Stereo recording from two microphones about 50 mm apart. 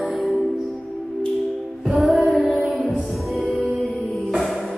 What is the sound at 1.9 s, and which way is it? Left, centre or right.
Music, centre.